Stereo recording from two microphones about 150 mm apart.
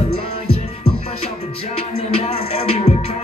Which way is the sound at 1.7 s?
40° left (ahead or behind).